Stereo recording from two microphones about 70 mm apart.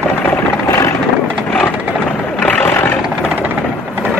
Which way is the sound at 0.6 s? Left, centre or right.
Left.